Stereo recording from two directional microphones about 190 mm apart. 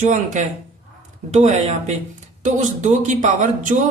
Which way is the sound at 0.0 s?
40° right (ahead or behind).